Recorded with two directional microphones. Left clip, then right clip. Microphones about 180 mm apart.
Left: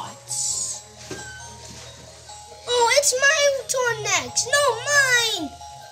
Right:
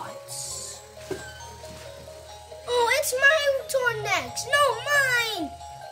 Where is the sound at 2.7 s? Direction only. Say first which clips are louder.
Left 4 dB; 25° left (ahead or behind).